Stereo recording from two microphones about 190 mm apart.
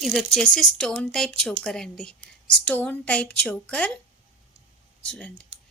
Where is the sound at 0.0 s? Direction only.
Centre (ahead or behind).